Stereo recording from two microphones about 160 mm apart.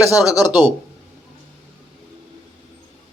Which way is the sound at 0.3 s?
25° left (ahead or behind).